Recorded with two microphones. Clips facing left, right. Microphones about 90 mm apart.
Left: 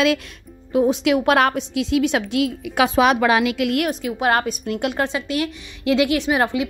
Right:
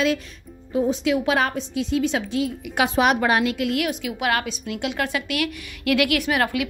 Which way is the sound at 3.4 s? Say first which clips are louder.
Left 3 dB; 80° left.